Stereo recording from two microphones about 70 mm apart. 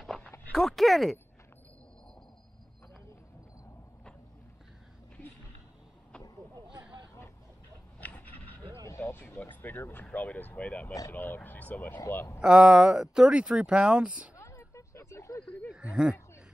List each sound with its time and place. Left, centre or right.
0.5 s speech: centre
8.0 s dog: left
9.0 s speech: left
12.4 s speech: centre
14.3 s a sound: left
15.7 s speech: centre